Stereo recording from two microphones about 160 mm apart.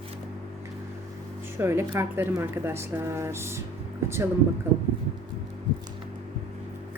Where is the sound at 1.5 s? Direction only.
15° right (ahead or behind).